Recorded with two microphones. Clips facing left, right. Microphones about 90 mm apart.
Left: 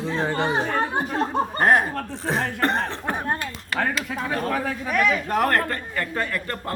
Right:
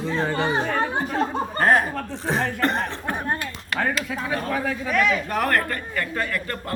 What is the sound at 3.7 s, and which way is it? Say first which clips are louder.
Speech: even; 50° left (ahead or behind).